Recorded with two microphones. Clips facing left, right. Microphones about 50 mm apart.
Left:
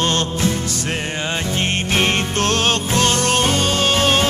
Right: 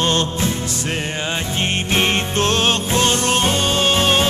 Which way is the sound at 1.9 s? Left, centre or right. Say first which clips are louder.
Even; right.